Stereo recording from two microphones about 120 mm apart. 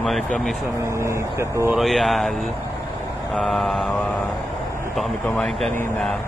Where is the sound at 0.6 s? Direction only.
25° right (ahead or behind).